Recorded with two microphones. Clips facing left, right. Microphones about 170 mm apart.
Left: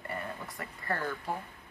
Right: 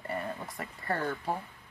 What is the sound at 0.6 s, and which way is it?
Speech, 25° right (ahead or behind).